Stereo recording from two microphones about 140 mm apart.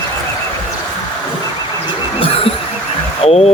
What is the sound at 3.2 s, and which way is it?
Vehicle, 50° left (ahead or behind).